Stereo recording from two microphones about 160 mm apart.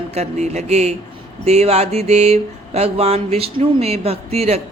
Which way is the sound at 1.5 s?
40° right (ahead or behind).